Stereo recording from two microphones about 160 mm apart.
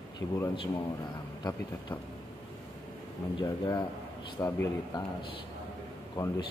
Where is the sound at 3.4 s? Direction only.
25° left (ahead or behind).